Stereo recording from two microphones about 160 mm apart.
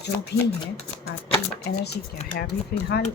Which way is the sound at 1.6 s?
90° left.